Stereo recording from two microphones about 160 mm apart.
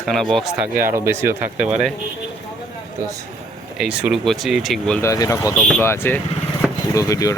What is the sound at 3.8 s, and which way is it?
Speech, 5° right (ahead or behind).